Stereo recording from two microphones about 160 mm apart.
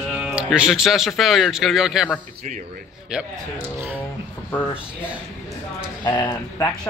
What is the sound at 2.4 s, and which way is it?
Speech, 50° right (ahead or behind).